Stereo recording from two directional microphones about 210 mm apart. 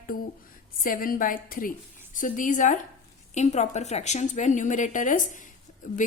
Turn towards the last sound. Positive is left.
turn(degrees=40)  # may be behind; listen again after turning